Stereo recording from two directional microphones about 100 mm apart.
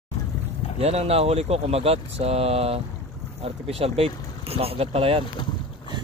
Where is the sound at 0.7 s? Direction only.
90° right.